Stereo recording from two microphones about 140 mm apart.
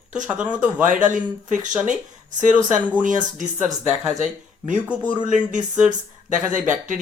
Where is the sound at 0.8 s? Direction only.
65° right (ahead or behind).